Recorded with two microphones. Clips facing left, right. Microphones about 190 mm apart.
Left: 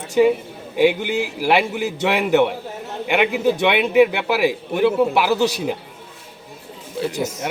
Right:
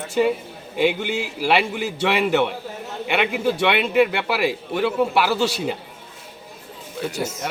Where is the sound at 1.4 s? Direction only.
10° left (ahead or behind).